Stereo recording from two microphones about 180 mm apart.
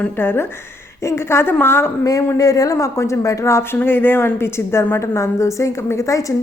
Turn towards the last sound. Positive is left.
turn(degrees=15)  # may be behind; listen again after turning